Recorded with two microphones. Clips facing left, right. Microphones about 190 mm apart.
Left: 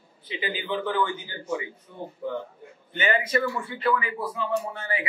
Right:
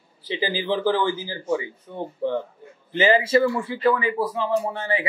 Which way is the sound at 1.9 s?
90° right.